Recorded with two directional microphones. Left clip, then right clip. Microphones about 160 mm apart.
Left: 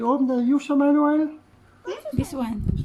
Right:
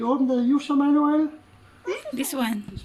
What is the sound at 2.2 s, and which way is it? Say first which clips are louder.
Speech: right 2 dB; 10° left (ahead or behind).